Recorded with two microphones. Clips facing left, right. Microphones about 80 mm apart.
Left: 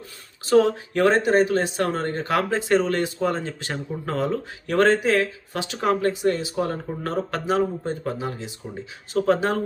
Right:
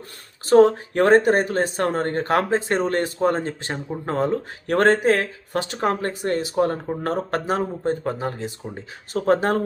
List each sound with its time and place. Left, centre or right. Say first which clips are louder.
0.4 s speech: right 4 dB; right
3.6 s speech: right 1 dB; right